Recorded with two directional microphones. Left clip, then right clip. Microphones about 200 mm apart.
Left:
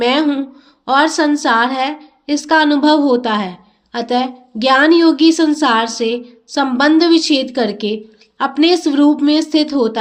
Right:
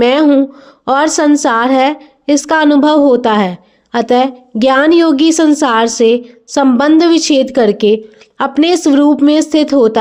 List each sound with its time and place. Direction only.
0.0 s a woman's voice: 50° right (ahead or behind)